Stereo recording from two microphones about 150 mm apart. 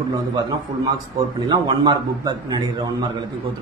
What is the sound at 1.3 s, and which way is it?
A man's voice, 30° right (ahead or behind).